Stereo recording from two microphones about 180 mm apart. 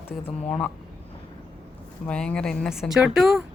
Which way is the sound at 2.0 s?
5° left (ahead or behind).